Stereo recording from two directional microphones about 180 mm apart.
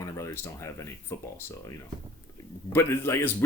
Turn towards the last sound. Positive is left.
turn(degrees=15)  # may be behind; listen again after turning